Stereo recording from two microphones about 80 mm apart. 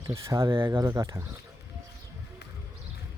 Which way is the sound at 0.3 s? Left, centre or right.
Right.